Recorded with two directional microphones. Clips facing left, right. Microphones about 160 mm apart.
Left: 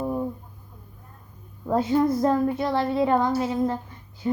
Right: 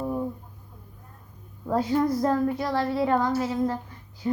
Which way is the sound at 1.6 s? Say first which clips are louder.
Left 2 dB; 20° left (ahead or behind).